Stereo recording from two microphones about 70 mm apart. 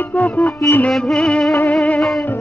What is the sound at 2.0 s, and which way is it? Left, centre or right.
Music, centre.